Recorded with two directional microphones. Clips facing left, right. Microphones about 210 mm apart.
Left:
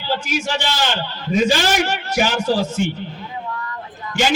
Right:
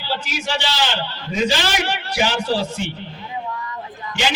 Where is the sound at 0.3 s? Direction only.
50° left (ahead or behind).